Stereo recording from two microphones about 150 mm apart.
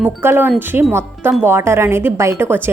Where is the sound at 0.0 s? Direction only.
15° right (ahead or behind).